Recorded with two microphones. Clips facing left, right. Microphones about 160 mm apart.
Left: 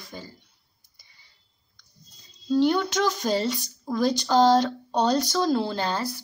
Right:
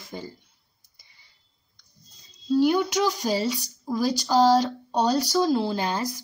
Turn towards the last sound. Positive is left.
turn(degrees=-15)  # may be behind; listen again after turning